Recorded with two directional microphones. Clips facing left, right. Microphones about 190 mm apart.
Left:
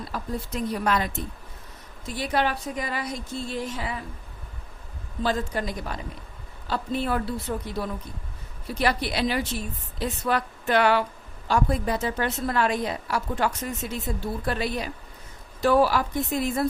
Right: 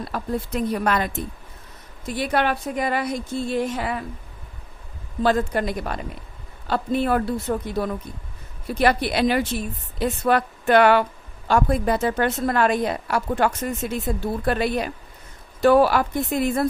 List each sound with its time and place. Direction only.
0.1 s a woman's voice: 60° right (ahead or behind)
5.2 s a woman's voice: 60° right (ahead or behind)
7.5 s speech: 45° right (ahead or behind)
8.8 s a woman's voice: 55° right (ahead or behind)